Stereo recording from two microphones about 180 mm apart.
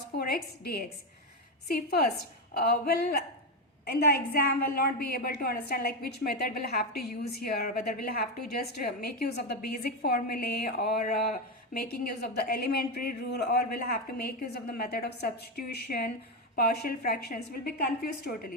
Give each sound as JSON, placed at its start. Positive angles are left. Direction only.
{"t": 0.3, "sound": "a woman's voice", "side_deg": 60}